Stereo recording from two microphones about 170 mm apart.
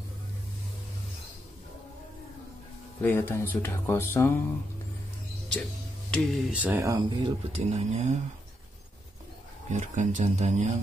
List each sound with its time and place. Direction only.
3.0 s speech: 10° left (ahead or behind)
5.5 s music: 5° left (ahead or behind)
6.5 s speech: 10° right (ahead or behind); by 7.6 s 25° right (ahead or behind)
7.7 s speech: 40° right (ahead or behind)
9.7 s speech: 45° right (ahead or behind)